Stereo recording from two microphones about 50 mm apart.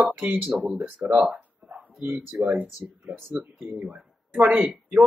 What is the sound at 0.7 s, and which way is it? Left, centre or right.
Speech, right.